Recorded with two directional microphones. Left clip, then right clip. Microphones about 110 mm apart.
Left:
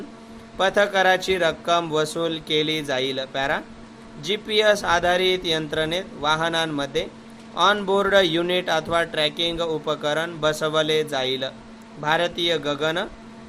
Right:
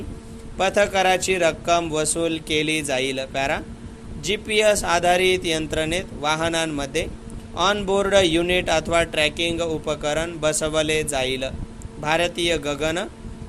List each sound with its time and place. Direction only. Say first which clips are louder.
0.5 s speech: even; 35° right (ahead or behind)
7.5 s a man's voice: left 1 dB; 35° right (ahead or behind)